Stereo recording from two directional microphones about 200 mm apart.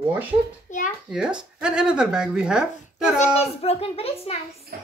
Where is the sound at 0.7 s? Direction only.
40° left (ahead or behind).